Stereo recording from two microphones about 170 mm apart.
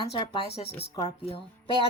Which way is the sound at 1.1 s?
35° left (ahead or behind).